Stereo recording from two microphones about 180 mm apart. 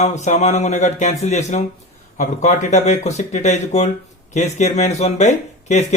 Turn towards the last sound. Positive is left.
turn(degrees=40)  # may be behind; listen again after turning